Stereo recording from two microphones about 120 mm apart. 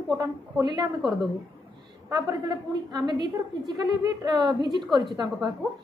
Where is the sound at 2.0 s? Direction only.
30° right (ahead or behind).